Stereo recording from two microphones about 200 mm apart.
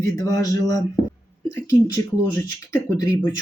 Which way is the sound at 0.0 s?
15° left (ahead or behind).